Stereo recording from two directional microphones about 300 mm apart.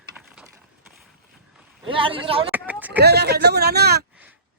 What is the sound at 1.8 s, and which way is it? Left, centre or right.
Speech, centre.